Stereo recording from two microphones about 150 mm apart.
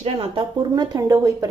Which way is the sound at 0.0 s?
35° right (ahead or behind).